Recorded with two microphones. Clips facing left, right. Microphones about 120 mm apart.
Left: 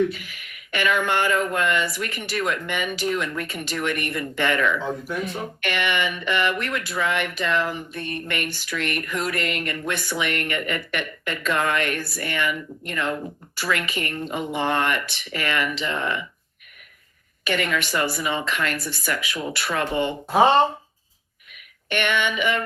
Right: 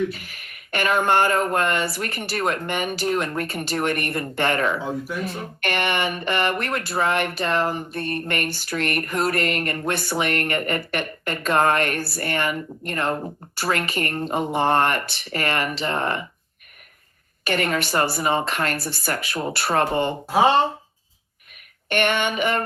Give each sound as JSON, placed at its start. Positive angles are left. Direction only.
{"t": 0.1, "sound": "speech", "side_deg": -40}
{"t": 17.4, "sound": "speech", "side_deg": -40}
{"t": 20.2, "sound": "speech", "side_deg": 0}
{"t": 21.5, "sound": "speech", "side_deg": -45}